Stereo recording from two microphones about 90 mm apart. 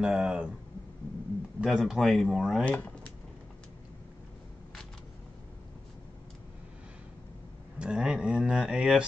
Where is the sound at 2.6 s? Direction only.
20° left (ahead or behind).